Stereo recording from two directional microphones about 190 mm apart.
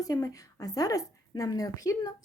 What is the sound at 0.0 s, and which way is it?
A woman's voice, 15° left (ahead or behind).